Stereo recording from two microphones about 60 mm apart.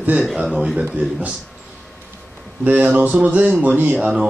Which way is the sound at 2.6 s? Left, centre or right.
Right.